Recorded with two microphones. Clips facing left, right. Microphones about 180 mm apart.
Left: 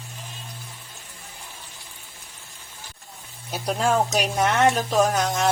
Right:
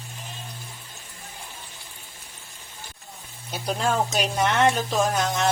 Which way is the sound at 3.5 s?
5° left (ahead or behind).